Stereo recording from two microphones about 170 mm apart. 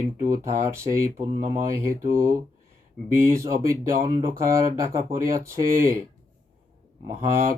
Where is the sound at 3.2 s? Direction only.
15° right (ahead or behind).